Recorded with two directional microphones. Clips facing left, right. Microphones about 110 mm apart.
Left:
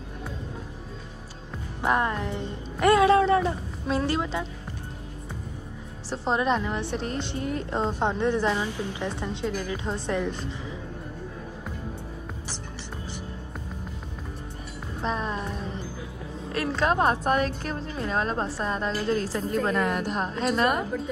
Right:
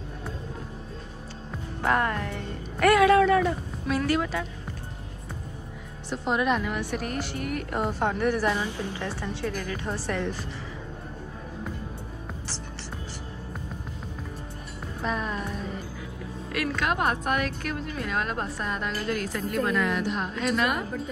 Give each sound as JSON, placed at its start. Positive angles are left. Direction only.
{"t": 1.8, "sound": "speech", "side_deg": 20}
{"t": 6.0, "sound": "a woman's voice", "side_deg": 30}
{"t": 15.0, "sound": "music", "side_deg": 30}
{"t": 16.5, "sound": "a woman's voice", "side_deg": 30}